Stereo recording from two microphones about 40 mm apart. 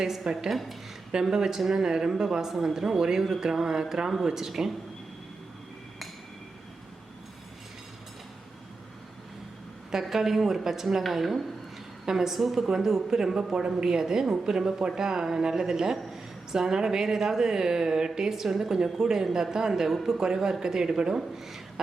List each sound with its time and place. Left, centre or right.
0.0 s a man's voice: centre
0.5 s speech: centre
1.1 s a man's voice: centre
9.9 s a man's voice: centre
18.3 s a man's voice: centre